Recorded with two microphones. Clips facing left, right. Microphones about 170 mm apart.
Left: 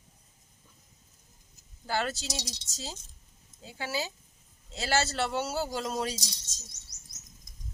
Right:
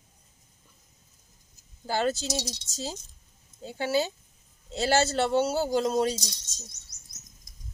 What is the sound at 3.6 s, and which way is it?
Speech, 30° right (ahead or behind).